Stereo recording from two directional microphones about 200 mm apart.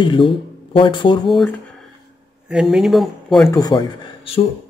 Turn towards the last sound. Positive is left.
turn(degrees=25)  # may be behind; listen again after turning